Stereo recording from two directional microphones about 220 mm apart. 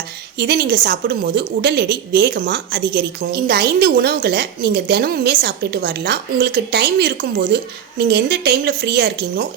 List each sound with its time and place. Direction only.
0.3 s a woman's voice: 45° right (ahead or behind)